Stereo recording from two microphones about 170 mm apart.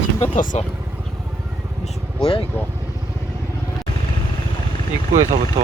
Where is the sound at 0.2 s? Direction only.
50° left (ahead or behind).